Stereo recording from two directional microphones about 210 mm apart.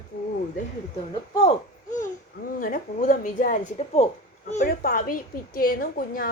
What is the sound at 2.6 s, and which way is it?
A woman's voice, 40° left (ahead or behind).